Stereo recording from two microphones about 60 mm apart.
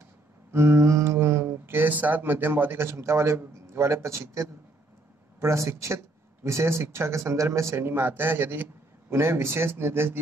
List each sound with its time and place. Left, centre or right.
0.5 s speech: right